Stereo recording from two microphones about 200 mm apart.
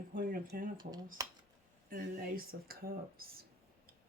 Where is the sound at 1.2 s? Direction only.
20° right (ahead or behind).